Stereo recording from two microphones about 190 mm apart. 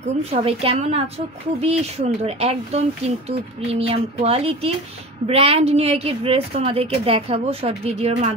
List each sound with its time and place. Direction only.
0.2 s speech: 30° right (ahead or behind)
3.8 s speech: 30° right (ahead or behind)